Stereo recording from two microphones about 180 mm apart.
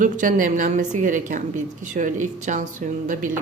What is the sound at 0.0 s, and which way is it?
A woman's voice, 45° right (ahead or behind).